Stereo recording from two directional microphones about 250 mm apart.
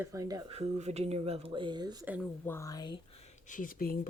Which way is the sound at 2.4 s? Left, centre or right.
Centre.